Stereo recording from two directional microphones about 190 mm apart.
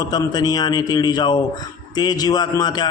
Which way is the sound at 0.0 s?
20° left (ahead or behind).